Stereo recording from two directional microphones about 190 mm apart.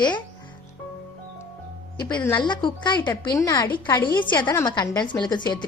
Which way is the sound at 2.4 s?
25° left (ahead or behind).